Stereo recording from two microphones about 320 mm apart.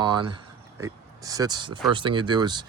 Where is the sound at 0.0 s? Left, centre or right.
Centre.